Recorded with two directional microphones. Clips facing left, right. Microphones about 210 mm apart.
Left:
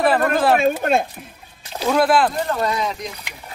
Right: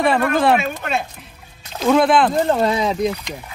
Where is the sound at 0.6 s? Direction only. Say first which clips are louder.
Left 6 dB; 50° left (ahead or behind).